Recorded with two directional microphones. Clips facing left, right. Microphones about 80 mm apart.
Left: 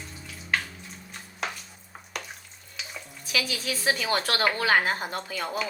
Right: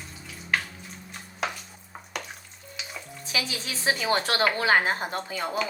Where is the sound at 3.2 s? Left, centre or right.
Right.